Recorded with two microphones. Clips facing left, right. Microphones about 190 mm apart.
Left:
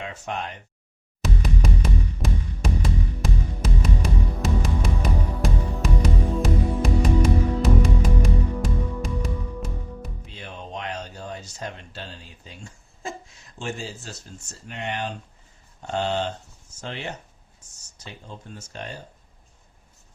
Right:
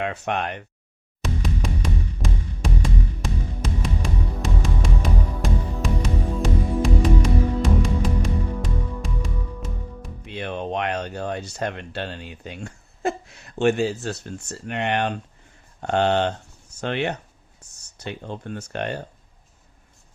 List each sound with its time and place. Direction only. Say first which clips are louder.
0.0 s speech: right 6 dB; 65° right (ahead or behind)
1.2 s music: even; centre (ahead or behind)
10.2 s speech: right 10 dB; 65° right (ahead or behind)